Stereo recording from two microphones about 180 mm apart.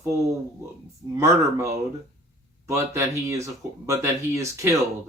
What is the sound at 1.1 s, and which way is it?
Speech, 15° right (ahead or behind).